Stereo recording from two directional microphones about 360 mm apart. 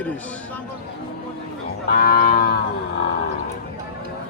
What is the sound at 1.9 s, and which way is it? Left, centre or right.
Cattle, left.